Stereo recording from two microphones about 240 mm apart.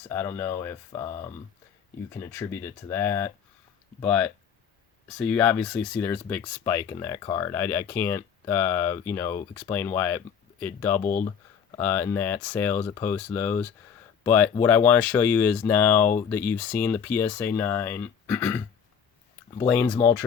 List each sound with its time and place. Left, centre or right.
0.1 s speech: centre
11.0 s speech: left
11.8 s speech: centre
19.6 s speech: centre